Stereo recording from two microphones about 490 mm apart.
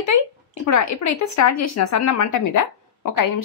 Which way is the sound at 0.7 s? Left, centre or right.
Left.